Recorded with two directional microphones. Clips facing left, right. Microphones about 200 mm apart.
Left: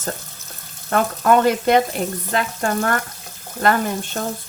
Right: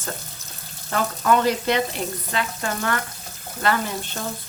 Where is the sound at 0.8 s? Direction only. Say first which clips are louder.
Left 4 dB; 55° left (ahead or behind).